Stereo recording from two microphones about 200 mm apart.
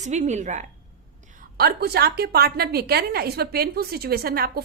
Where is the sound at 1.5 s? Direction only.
50° right (ahead or behind).